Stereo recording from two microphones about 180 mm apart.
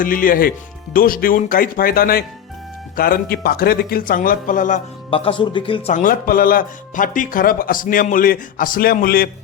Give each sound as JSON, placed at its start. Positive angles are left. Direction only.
{"t": 0.0, "sound": "speech", "side_deg": 50}
{"t": 5.1, "sound": "speech", "side_deg": 30}
{"t": 5.9, "sound": "speech", "side_deg": 50}